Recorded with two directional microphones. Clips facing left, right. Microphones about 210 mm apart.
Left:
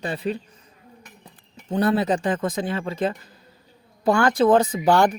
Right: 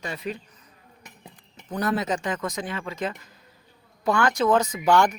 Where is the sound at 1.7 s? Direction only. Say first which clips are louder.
Left 5 dB; 30° left (ahead or behind).